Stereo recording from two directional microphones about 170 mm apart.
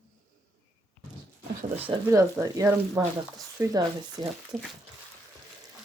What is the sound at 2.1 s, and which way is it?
Speech, 20° right (ahead or behind).